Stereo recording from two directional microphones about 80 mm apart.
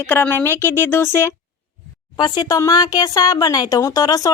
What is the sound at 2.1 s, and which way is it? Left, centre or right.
Speech, left.